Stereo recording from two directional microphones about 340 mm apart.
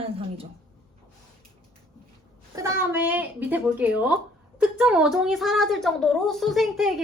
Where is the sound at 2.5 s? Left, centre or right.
Centre.